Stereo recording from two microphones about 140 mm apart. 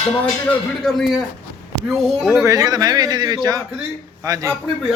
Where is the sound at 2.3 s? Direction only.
20° right (ahead or behind).